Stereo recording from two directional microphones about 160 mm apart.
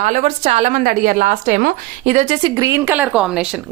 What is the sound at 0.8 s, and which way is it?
A woman's voice, 60° right (ahead or behind).